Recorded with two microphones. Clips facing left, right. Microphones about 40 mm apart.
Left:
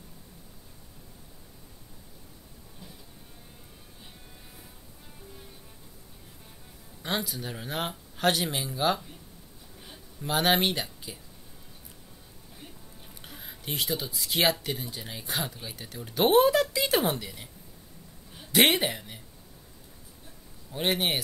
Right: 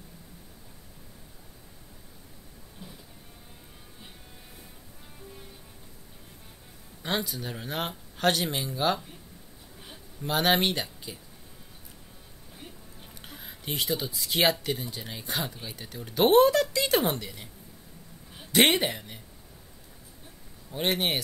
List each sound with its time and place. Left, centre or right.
2.8 s train: right
7.0 s speech: centre
10.2 s speech: centre
13.2 s speech: centre
18.5 s a woman's voice: centre
20.7 s speech: centre